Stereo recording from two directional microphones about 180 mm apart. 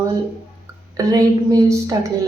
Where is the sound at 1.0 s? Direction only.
20° right (ahead or behind).